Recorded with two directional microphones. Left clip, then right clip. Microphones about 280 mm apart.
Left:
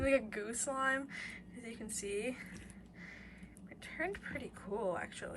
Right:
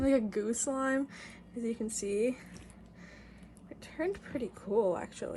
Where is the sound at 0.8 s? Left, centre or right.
Centre.